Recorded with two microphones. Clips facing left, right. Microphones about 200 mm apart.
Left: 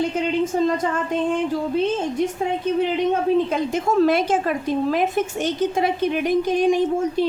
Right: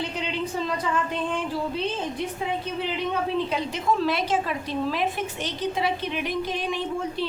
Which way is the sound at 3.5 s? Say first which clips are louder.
Left 5 dB; 45° left (ahead or behind).